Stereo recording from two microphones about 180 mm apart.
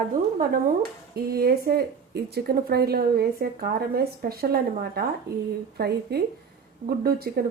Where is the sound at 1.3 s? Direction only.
60° right (ahead or behind).